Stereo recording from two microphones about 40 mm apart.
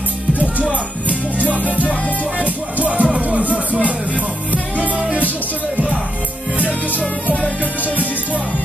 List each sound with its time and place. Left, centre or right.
0.4 s music: right
2.8 s music: right
6.9 s music: left